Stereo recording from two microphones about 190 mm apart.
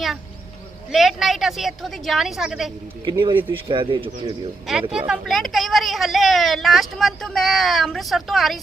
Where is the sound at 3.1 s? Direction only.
25° right (ahead or behind).